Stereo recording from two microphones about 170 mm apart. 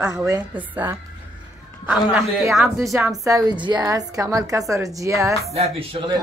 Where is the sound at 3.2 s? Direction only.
20° right (ahead or behind).